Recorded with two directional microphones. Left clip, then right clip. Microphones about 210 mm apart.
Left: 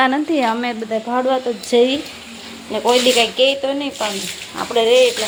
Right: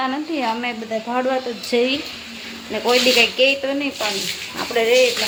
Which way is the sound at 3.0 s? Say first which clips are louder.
Left 1 dB; 10° left (ahead or behind).